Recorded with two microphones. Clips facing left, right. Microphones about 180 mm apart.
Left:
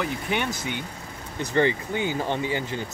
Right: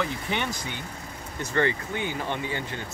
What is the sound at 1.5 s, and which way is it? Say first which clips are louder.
Speech: left 3 dB; 25° left (ahead or behind).